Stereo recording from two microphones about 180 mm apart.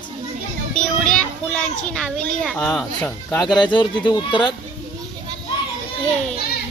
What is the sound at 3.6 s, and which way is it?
Speech, 25° left (ahead or behind).